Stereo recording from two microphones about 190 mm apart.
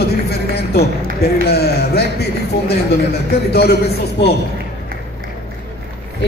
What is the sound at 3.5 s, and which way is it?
Speech, 55° left (ahead or behind).